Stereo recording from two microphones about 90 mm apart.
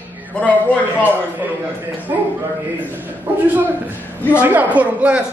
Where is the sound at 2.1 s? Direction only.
30° right (ahead or behind).